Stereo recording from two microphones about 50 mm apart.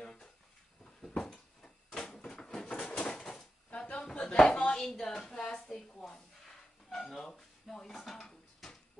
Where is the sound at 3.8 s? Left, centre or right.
Centre.